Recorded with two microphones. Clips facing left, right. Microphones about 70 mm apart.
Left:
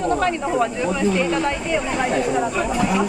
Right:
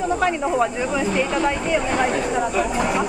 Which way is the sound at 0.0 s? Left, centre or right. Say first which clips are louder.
Even; centre.